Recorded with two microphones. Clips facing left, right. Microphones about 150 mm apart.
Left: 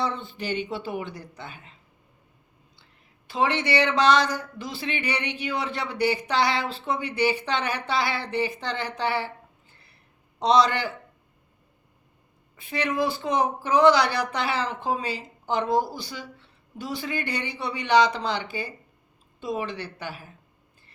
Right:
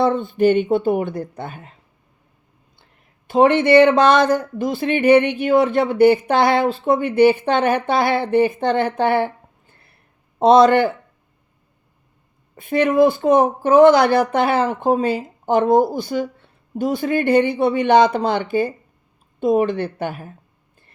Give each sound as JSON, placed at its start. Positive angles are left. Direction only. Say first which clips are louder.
{"t": 0.0, "sound": "speech", "louder": "right 14 dB", "side_deg": -50}
{"t": 3.2, "sound": "speech", "louder": "right 11 dB", "side_deg": -50}
{"t": 12.5, "sound": "speech", "louder": "right 11 dB", "side_deg": -50}